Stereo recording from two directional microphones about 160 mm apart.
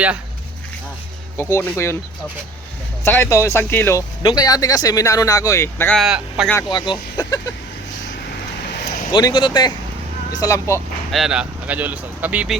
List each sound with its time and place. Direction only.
1.4 s speech: 15° left (ahead or behind)
3.0 s speech: 15° left (ahead or behind)
4.2 s speech: 25° left (ahead or behind)
6.0 s speech: 5° right (ahead or behind)
6.7 s speech: 30° left (ahead or behind)
9.1 s speech: 30° left (ahead or behind)
11.1 s speech: 5° right (ahead or behind)